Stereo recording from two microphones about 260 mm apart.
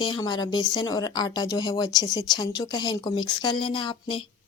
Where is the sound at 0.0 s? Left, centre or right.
Centre.